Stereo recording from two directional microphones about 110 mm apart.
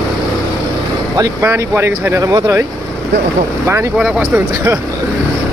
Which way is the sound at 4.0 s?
5° right (ahead or behind).